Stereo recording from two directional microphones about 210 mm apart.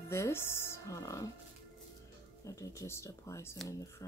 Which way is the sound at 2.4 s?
15° left (ahead or behind).